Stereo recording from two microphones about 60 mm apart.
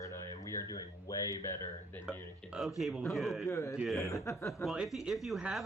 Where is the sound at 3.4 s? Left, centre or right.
Left.